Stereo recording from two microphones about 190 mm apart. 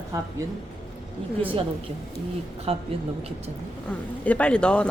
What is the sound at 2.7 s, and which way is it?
Speech, 30° right (ahead or behind).